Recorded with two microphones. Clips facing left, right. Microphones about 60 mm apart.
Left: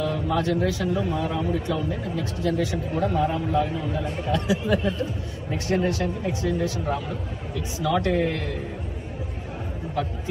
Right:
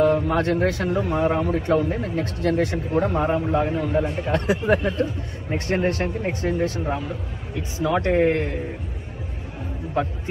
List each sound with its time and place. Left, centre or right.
0.0 s a man's voice: right
10.0 s speech: right